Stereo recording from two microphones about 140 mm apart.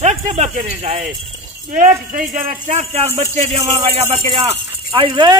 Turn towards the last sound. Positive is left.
turn(degrees=-45)  # may be behind; listen again after turning